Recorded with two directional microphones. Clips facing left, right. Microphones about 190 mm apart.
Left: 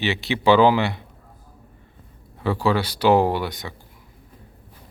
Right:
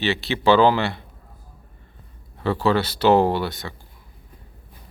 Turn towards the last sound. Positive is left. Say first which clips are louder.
# right 1 dB
turn(degrees=15)  # may be behind; listen again after turning